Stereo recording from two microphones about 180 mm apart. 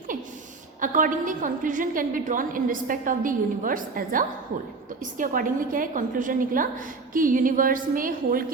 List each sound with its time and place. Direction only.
0.8 s a woman's voice: 45° right (ahead or behind)